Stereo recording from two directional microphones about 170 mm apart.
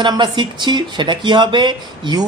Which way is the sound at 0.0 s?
25° right (ahead or behind).